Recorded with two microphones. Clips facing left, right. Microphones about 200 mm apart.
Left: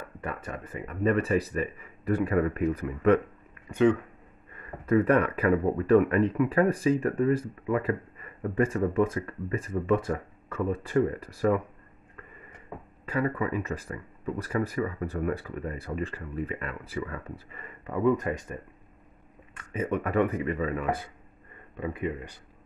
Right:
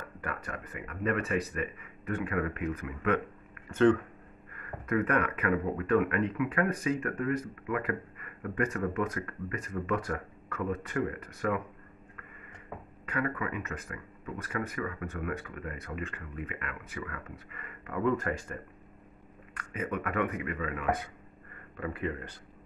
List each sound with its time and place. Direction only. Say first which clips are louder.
0.2 s speech: left 3 dB; 25° left (ahead or behind)
3.6 s speech: left 1 dB; 15° left (ahead or behind)
4.6 s speech: left 6 dB; 30° left (ahead or behind)
13.0 s speech: left 5 dB; 30° left (ahead or behind)
21.7 s speech: left 3 dB; 20° left (ahead or behind)